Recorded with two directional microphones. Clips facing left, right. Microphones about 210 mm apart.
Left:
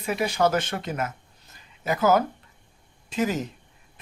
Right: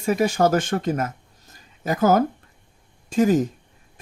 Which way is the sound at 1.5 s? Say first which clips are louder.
Right 2 dB; 45° right (ahead or behind).